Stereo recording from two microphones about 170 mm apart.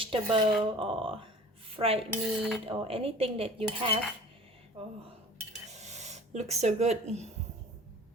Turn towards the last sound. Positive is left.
turn(degrees=-40)  # may be behind; listen again after turning